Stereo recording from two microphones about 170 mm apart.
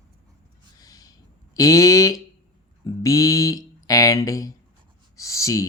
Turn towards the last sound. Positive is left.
turn(degrees=20)  # may be behind; listen again after turning